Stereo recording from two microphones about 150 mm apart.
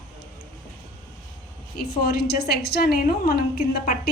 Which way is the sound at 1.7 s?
90° left.